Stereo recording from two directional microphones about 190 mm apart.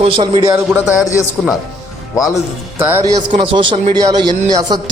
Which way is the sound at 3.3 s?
30° right (ahead or behind).